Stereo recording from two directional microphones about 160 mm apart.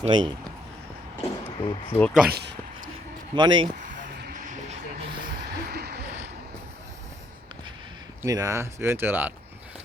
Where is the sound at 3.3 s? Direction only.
30° right (ahead or behind).